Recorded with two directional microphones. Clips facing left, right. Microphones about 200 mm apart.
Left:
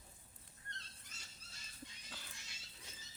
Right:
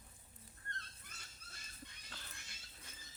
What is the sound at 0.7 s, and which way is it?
Dog, 55° right (ahead or behind).